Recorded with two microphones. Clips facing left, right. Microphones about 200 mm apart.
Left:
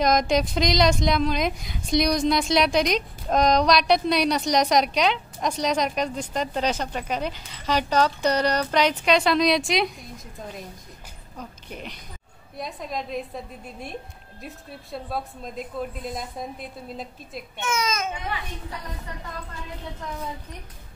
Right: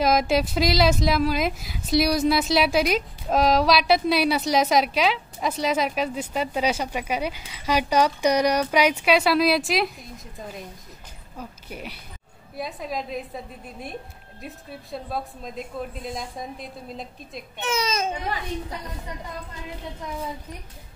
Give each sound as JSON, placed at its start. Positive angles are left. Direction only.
{"t": 0.0, "sound": "speech", "side_deg": -5}
{"t": 17.6, "sound": "a child's voice", "side_deg": -30}